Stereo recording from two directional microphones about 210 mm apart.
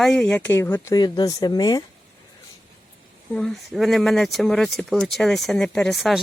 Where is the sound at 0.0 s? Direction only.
5° left (ahead or behind); by 1.8 s 20° left (ahead or behind).